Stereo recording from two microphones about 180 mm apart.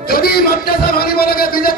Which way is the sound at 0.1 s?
55° left (ahead or behind).